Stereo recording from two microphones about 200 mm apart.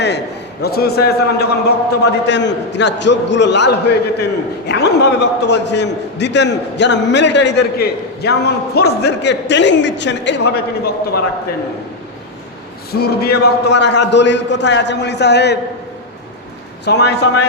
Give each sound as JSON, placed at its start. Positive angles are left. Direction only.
{"t": 0.6, "sound": "a man's voice", "side_deg": 50}
{"t": 12.9, "sound": "a man's voice", "side_deg": 50}
{"t": 16.8, "sound": "a man's voice", "side_deg": 55}